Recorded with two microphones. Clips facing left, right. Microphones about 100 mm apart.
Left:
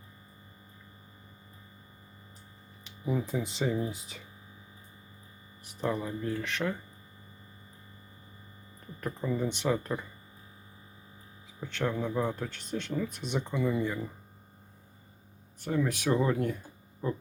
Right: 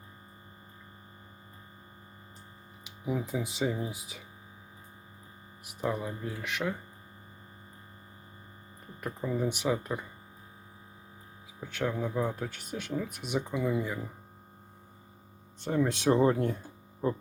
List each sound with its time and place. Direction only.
2.8 s speech: 5° right (ahead or behind)
5.8 s speech: 10° right (ahead or behind)
9.0 s speech: 10° right (ahead or behind)
11.6 s speech: 10° right (ahead or behind)
15.6 s speech: 25° right (ahead or behind)